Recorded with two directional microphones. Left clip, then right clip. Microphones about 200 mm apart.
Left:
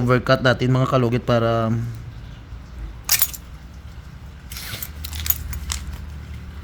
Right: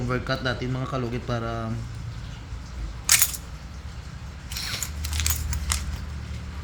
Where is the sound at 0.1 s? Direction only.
65° left (ahead or behind).